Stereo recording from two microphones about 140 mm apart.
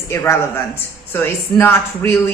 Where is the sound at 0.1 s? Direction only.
20° left (ahead or behind).